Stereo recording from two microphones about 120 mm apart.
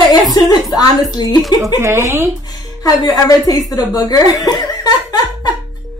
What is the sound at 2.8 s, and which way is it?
Speech, 30° left (ahead or behind).